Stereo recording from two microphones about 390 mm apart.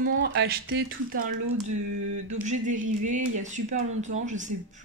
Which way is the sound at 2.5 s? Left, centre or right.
Centre.